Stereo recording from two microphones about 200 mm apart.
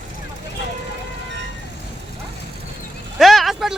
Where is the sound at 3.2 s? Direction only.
Centre (ahead or behind).